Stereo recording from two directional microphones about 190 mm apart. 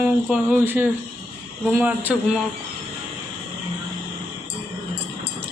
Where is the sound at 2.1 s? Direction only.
5° right (ahead or behind).